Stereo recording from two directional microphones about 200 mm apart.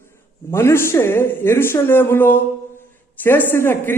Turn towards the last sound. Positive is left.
turn(degrees=10)  # may be behind; listen again after turning